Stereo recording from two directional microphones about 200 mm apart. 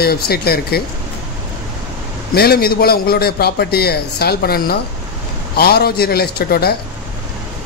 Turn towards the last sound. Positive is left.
turn(degrees=50)  # may be behind; listen again after turning